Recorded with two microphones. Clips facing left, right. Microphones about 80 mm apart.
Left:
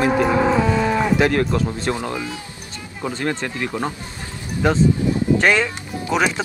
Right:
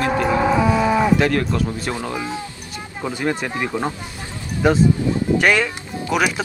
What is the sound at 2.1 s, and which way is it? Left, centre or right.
Speech, right.